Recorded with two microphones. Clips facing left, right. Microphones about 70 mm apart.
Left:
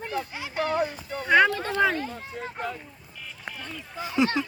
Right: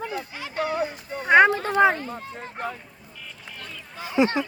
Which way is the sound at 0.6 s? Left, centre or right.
Centre.